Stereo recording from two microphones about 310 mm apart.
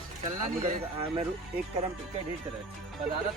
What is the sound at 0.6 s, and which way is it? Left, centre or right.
Speech, right.